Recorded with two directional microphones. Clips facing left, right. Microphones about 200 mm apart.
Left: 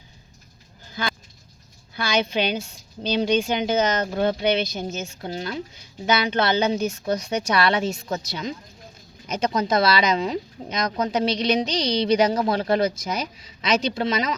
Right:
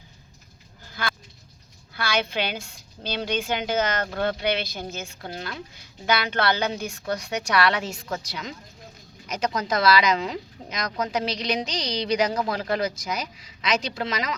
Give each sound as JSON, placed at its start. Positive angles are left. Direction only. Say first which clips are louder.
{"t": 1.9, "sound": "speech", "louder": "left 3 dB", "side_deg": 20}